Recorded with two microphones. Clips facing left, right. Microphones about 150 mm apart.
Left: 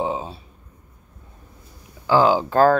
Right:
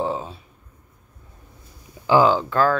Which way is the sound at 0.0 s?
20° left (ahead or behind).